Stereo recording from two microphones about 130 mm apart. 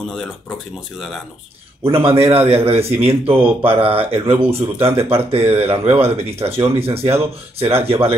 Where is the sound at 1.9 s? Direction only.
50° right (ahead or behind).